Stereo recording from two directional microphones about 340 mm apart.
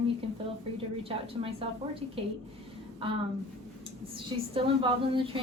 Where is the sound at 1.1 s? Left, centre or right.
Centre.